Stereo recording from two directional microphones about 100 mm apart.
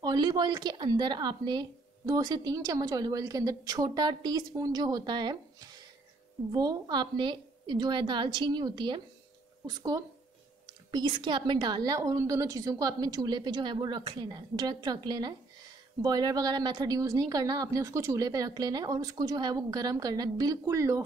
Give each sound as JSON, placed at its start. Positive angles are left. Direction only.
{"t": 0.0, "sound": "a woman's voice", "side_deg": -45}